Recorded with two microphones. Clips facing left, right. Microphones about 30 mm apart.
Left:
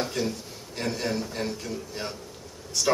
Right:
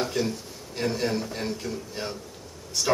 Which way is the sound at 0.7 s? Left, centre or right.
Centre.